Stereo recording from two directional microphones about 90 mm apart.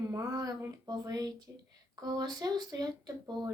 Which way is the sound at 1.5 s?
25° right (ahead or behind).